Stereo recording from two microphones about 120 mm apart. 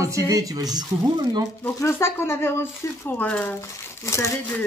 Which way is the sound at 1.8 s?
20° left (ahead or behind).